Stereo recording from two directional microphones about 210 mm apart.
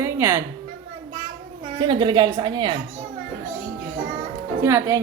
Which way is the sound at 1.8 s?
20° right (ahead or behind).